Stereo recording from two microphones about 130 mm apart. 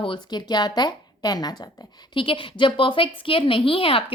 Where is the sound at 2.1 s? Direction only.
40° left (ahead or behind).